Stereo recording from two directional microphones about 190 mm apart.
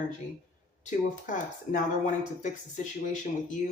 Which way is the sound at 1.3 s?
40° left (ahead or behind).